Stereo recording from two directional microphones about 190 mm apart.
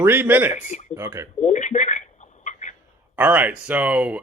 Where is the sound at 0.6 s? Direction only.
40° left (ahead or behind).